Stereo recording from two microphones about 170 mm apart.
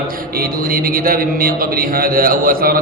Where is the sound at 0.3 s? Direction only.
60° right (ahead or behind).